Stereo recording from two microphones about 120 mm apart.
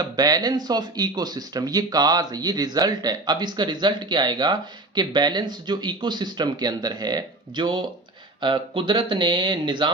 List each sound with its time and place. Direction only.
0.0 s speech: 35° right (ahead or behind)